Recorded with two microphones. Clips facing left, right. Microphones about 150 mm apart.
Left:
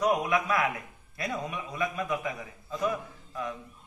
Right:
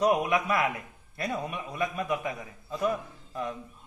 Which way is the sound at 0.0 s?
25° right (ahead or behind).